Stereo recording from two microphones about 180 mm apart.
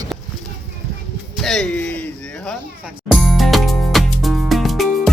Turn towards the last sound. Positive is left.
turn(degrees=0)  # may be behind; listen again after turning